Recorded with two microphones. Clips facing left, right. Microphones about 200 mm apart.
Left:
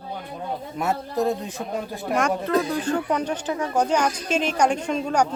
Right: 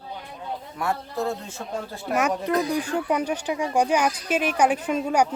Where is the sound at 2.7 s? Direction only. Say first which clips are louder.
Left 1 dB; 10° right (ahead or behind).